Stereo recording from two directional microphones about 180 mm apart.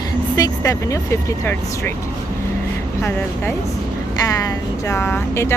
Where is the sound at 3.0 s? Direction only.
15° left (ahead or behind).